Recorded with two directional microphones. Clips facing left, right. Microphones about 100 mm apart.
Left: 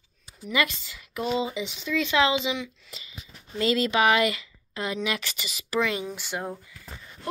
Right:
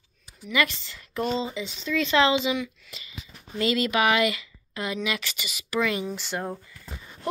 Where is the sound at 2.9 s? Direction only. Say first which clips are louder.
Right 1 dB; 35° left (ahead or behind).